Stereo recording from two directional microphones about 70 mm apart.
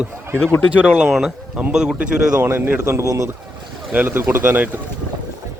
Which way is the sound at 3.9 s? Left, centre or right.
Right.